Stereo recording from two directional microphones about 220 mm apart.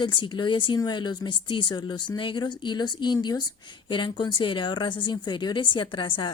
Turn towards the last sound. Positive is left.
turn(degrees=20)  # may be behind; listen again after turning